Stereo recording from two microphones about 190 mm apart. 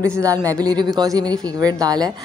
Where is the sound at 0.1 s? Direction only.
15° right (ahead or behind).